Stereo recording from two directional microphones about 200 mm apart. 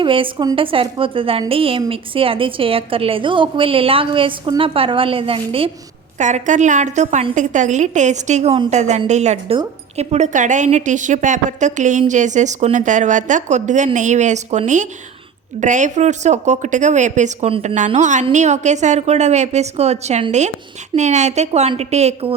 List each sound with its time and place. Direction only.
0.0 s a woman's voice: 25° right (ahead or behind)